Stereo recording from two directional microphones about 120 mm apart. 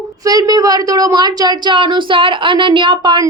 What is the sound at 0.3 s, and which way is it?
A woman's voice, 30° right (ahead or behind).